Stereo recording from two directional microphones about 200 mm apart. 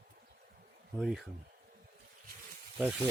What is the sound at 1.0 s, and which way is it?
Speech, centre (ahead or behind).